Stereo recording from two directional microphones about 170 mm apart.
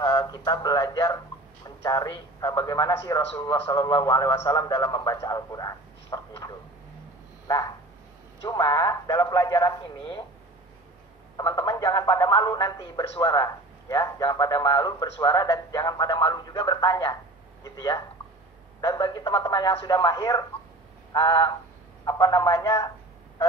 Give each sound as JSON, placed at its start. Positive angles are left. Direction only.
{"t": 0.0, "sound": "a man's voice", "side_deg": 20}
{"t": 7.4, "sound": "a sound", "side_deg": 20}
{"t": 8.5, "sound": "a man's voice", "side_deg": 20}
{"t": 11.3, "sound": "a man's voice", "side_deg": 25}